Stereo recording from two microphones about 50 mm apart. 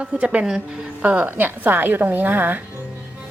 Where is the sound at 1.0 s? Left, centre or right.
Right.